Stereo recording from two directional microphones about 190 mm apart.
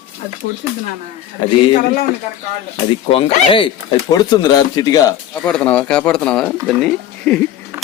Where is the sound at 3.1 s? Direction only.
30° left (ahead or behind).